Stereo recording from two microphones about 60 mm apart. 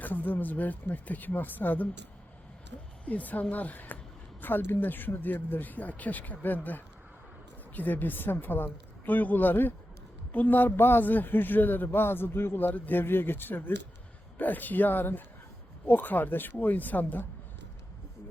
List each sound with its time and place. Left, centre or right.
0.0 s speech: left
3.1 s a man's voice: left